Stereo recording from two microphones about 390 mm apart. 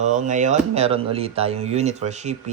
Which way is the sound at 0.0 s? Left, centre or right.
Centre.